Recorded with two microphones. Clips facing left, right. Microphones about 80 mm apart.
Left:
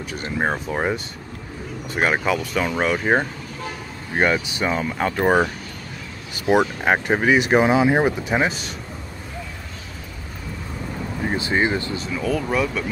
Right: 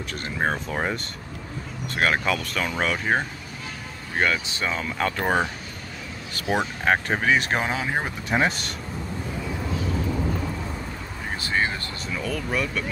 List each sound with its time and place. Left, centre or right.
0.1 s speech: centre
11.2 s speech: left
12.0 s speech: centre